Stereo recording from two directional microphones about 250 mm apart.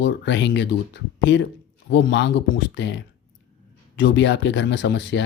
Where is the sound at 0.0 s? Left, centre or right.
Left.